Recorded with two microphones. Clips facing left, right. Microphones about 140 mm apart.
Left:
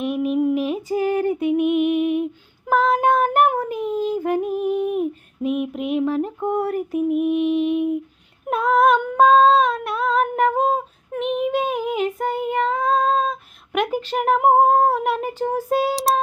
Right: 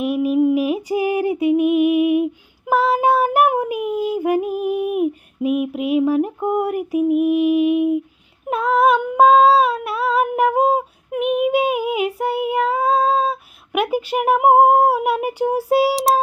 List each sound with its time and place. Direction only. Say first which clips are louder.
0.0 s female singing: right 3 dB; 5° right (ahead or behind)